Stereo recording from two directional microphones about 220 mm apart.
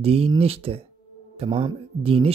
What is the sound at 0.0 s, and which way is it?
Speech, 25° right (ahead or behind).